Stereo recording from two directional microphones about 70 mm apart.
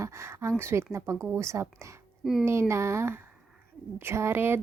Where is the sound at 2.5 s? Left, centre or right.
Right.